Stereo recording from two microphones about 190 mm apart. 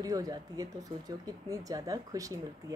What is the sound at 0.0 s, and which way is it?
Speech, 20° right (ahead or behind).